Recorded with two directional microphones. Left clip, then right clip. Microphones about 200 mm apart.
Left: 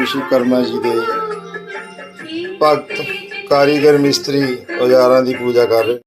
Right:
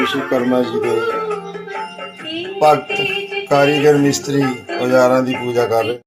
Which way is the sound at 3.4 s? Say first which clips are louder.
Left 2 dB; 15° left (ahead or behind).